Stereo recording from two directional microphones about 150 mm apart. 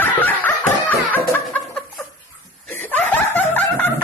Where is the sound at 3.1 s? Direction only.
10° left (ahead or behind).